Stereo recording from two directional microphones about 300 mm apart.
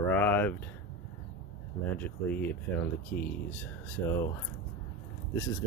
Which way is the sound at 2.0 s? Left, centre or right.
Centre.